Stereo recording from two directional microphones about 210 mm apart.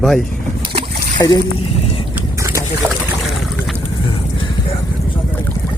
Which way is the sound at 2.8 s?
5° left (ahead or behind).